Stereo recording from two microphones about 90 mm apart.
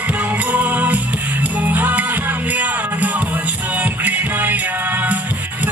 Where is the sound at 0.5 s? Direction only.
20° right (ahead or behind).